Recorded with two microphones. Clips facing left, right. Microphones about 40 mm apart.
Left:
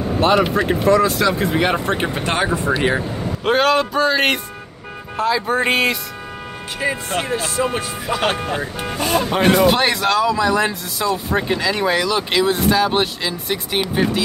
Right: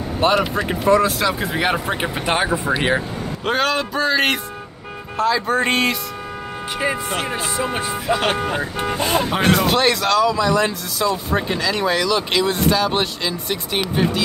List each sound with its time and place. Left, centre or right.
1.0 s speech: centre
3.0 s speech: centre
6.8 s speech: centre
7.6 s speech: centre
8.1 s speech: centre
9.4 s speech: centre